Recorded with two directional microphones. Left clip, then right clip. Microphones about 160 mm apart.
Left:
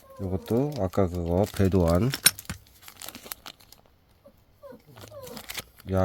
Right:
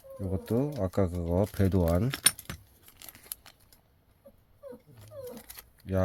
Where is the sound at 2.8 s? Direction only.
35° left (ahead or behind).